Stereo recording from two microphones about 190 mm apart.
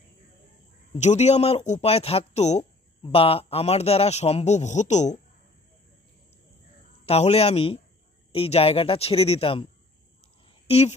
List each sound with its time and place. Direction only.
0.9 s speech: 35° left (ahead or behind)
7.1 s speech: 30° left (ahead or behind)
10.7 s speech: 35° left (ahead or behind)